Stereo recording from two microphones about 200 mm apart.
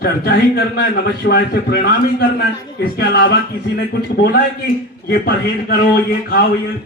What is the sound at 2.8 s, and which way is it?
A man's voice, 55° left (ahead or behind).